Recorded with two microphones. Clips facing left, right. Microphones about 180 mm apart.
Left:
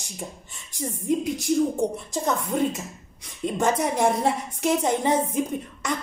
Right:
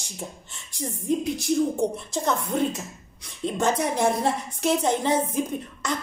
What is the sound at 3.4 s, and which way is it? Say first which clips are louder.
A woman's voice: left 1 dB; 10° left (ahead or behind).